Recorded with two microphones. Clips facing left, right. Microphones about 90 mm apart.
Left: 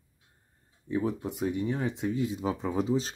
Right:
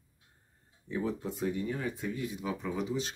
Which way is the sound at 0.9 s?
15° left (ahead or behind).